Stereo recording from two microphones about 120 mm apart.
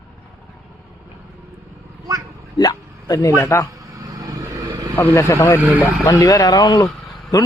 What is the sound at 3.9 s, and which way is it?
Vehicle, 30° right (ahead or behind).